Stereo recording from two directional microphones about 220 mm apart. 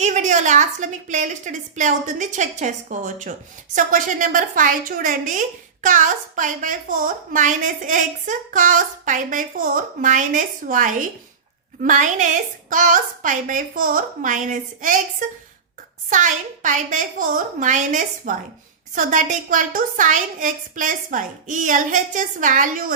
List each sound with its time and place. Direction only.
0.0 s a woman's voice: 35° right (ahead or behind)